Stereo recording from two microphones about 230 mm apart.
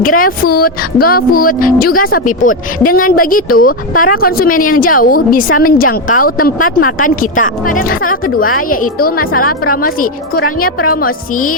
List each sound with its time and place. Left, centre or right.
0.0 s speech: left